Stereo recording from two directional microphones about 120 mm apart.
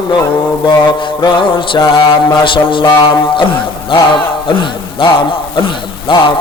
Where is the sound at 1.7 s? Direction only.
45° left (ahead or behind).